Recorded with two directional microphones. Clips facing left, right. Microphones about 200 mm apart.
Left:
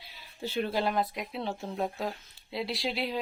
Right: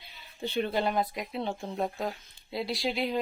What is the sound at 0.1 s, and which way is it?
Speech, centre (ahead or behind).